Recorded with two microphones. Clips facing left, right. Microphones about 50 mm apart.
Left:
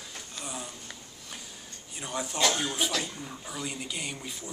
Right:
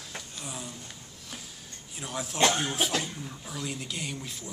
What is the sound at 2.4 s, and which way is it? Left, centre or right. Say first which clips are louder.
Speech: right 3 dB; right.